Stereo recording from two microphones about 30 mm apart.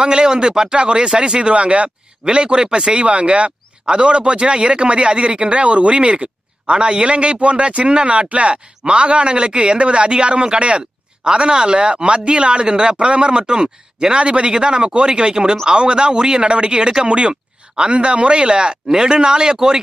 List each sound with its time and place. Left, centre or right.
0.0 s speech: right
2.2 s speech: right
2.9 s speech: right